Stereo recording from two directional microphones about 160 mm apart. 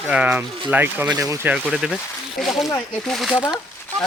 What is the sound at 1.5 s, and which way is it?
Speech, centre (ahead or behind).